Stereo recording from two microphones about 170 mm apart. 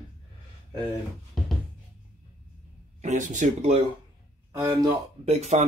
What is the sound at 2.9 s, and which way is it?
Speech, 45° right (ahead or behind).